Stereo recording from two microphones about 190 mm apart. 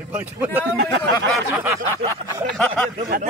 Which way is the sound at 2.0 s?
35° right (ahead or behind).